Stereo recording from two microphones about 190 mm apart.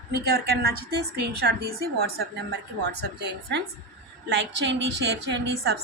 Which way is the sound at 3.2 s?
65° right (ahead or behind).